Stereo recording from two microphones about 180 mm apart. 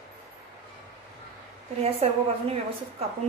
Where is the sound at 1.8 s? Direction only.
35° right (ahead or behind).